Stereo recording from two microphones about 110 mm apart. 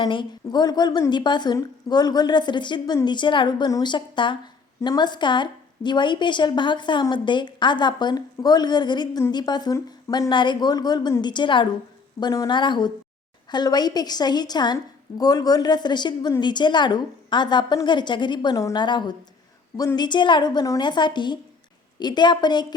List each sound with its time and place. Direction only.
0.0 s a woman's voice: 45° left (ahead or behind)
12.2 s a woman's voice: 30° left (ahead or behind)
12.5 s a woman's voice: 45° left (ahead or behind)
18.5 s a woman's voice: 30° left (ahead or behind)
18.8 s a woman's voice: 45° left (ahead or behind)